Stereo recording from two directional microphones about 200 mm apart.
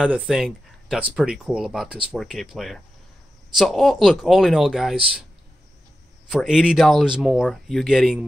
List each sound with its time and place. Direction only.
0.0 s speech: 5° right (ahead or behind)
6.3 s speech: 5° right (ahead or behind)